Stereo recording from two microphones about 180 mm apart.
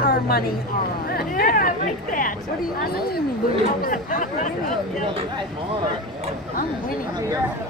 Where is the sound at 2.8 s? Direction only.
55° left (ahead or behind).